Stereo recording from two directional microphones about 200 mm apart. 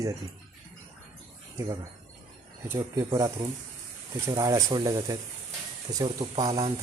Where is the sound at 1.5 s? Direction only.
15° right (ahead or behind).